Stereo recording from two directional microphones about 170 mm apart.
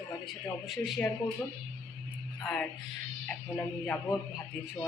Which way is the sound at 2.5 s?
Centre (ahead or behind).